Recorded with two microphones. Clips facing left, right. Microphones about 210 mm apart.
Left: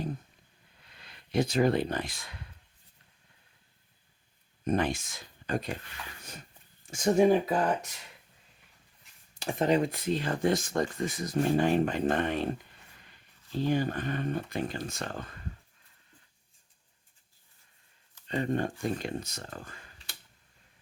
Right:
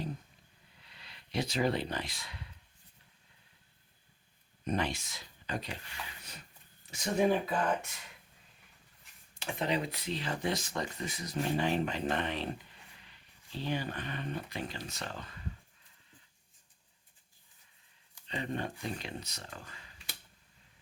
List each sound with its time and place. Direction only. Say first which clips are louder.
0.9 s speech: left 6 dB; 50° left (ahead or behind)
4.6 s speech: left 5 dB; 50° left (ahead or behind)
6.8 s speech: left 6 dB; 45° left (ahead or behind)
9.4 s speech: left 7 dB; 45° left (ahead or behind)
18.3 s speech: left 7 dB; 45° left (ahead or behind)